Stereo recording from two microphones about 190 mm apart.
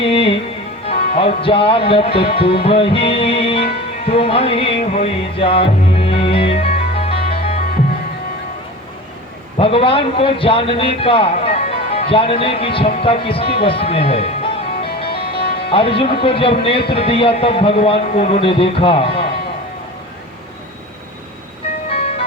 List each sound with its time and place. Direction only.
0.0 s music: 30° left (ahead or behind)
1.1 s a man's voice: 30° left (ahead or behind)
2.6 s music: 30° left (ahead or behind)
9.6 s a man's voice: 30° left (ahead or behind)
15.0 s music: 30° left (ahead or behind)
15.7 s a man's voice: 30° left (ahead or behind)
21.8 s music: 30° left (ahead or behind)